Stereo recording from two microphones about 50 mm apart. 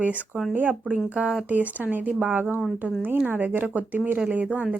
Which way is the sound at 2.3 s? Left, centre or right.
Right.